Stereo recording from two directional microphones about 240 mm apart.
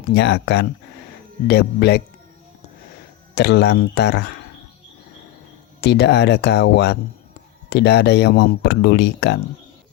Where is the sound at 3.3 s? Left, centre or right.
Left.